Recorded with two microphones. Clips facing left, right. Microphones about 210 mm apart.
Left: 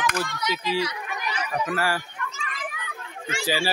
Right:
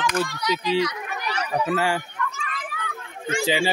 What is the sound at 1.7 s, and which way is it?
Speech, 25° right (ahead or behind).